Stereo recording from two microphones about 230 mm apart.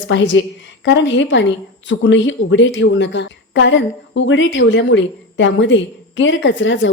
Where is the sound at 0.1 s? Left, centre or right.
Left.